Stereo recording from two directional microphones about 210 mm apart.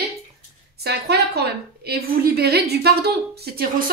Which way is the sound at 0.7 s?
50° right (ahead or behind).